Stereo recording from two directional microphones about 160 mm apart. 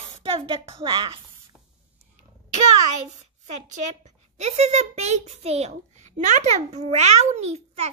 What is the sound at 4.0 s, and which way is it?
A child's voice, 45° right (ahead or behind).